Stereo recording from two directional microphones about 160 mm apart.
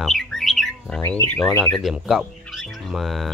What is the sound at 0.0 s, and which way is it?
Bird, centre (ahead or behind).